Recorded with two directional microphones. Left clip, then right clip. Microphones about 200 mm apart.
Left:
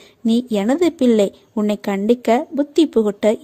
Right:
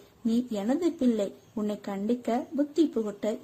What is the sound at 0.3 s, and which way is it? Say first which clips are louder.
A woman's voice: left 11 dB; 45° left (ahead or behind).